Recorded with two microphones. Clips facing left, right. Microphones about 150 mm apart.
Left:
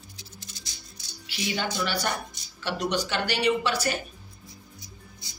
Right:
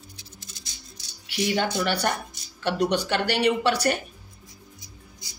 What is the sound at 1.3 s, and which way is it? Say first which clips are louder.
Speech: right 5 dB; 60° right (ahead or behind).